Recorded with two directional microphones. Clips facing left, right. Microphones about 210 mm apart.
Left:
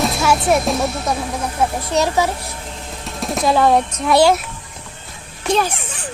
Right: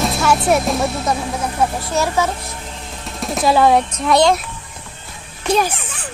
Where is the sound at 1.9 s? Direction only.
20° left (ahead or behind).